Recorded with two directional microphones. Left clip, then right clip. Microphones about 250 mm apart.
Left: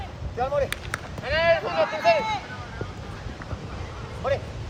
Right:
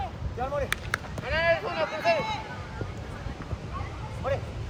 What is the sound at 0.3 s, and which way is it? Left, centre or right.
Speech, left.